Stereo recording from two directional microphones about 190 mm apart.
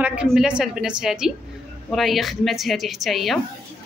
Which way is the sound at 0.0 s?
5° right (ahead or behind).